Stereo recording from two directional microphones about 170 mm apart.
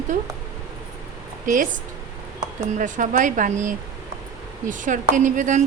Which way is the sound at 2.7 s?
50° right (ahead or behind).